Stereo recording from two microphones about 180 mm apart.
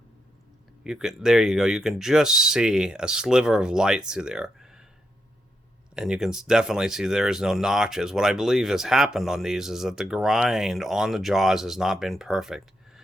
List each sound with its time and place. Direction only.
0.9 s speech: 5° right (ahead or behind)
5.9 s speech: 5° right (ahead or behind)